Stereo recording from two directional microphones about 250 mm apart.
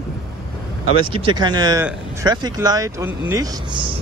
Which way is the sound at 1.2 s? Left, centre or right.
Centre.